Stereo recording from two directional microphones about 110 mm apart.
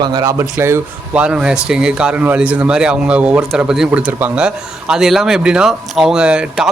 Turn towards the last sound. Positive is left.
turn(degrees=-10)  # may be behind; listen again after turning